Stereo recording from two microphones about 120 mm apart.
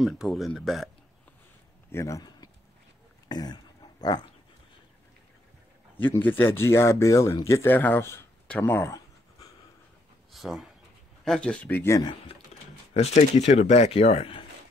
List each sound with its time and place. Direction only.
0.0 s speech: centre (ahead or behind)
1.9 s speech: 25° left (ahead or behind)
4.0 s dog: 35° left (ahead or behind)
5.9 s speech: 15° left (ahead or behind)
8.5 s a sound: 20° left (ahead or behind)
10.3 s speech: centre (ahead or behind); by 12.0 s 15° left (ahead or behind)
12.9 s speech: 60° left (ahead or behind)